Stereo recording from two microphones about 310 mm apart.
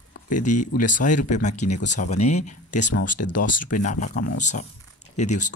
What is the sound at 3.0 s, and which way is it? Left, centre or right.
Speech, left.